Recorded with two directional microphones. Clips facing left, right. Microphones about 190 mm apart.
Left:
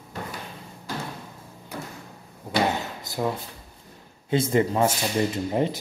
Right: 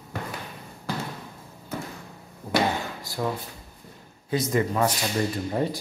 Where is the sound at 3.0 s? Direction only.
20° left (ahead or behind).